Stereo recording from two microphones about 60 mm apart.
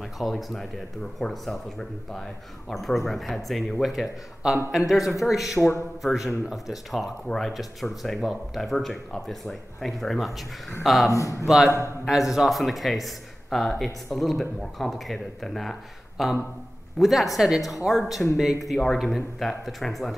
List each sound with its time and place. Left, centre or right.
0.0 s a man's voice: centre
11.1 s speech: left
11.4 s a man's voice: centre